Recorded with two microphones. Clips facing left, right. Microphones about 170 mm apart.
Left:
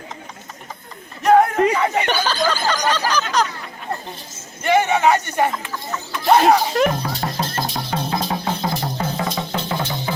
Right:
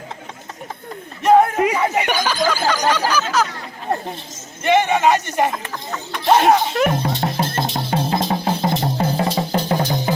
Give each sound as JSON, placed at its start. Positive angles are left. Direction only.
{"t": 1.2, "sound": "a sound", "side_deg": 0}
{"t": 4.6, "sound": "a man's voice", "side_deg": 0}
{"t": 6.9, "sound": "speech", "side_deg": -25}
{"t": 7.3, "sound": "music", "side_deg": -30}